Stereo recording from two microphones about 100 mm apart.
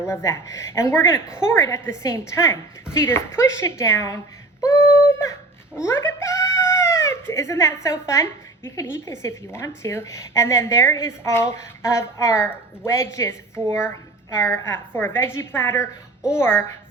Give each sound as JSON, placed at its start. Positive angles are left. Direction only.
{"t": 0.1, "sound": "speech", "side_deg": 30}
{"t": 4.6, "sound": "a sound", "side_deg": 30}
{"t": 5.8, "sound": "speech", "side_deg": 25}